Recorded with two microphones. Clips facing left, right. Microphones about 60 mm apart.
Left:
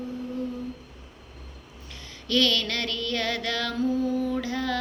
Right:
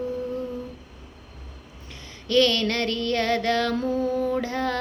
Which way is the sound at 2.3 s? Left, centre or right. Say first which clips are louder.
Right 4 dB; right.